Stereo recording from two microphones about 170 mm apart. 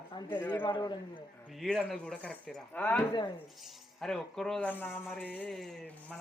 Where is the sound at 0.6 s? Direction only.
30° left (ahead or behind).